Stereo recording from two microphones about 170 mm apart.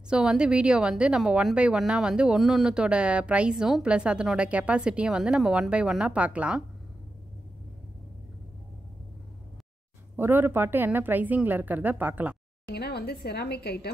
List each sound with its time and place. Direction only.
0.1 s a woman's voice: 5° right (ahead or behind)
10.1 s a woman's voice: 10° right (ahead or behind)
12.7 s a woman's voice: 70° left (ahead or behind)